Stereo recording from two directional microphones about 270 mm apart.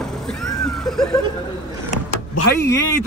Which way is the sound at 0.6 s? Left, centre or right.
Centre.